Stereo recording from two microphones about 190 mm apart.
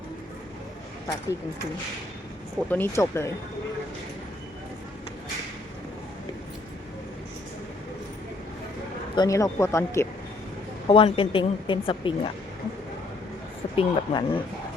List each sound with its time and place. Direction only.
2.6 s speech: 10° left (ahead or behind)
9.1 s speech: 20° left (ahead or behind)
10.8 s a woman's voice: 30° left (ahead or behind)
13.7 s a woman's voice: 25° left (ahead or behind)